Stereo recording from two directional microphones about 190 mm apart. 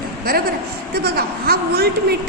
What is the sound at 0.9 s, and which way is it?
A woman's voice, 55° right (ahead or behind).